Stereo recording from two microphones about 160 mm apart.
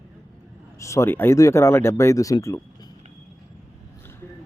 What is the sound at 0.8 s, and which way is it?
Speech, 20° left (ahead or behind).